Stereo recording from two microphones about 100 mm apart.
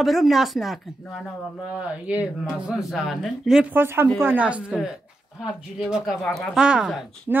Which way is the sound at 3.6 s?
20° right (ahead or behind).